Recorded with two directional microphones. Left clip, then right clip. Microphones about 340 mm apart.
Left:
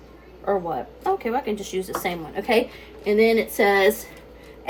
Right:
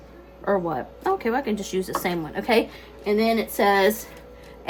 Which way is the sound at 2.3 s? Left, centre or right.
Right.